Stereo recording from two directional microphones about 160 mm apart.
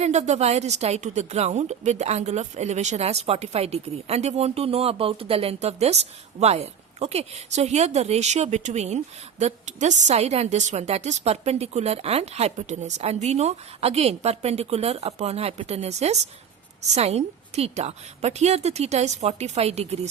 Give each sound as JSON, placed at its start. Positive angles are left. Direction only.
{"t": 0.0, "sound": "a woman's voice", "side_deg": -45}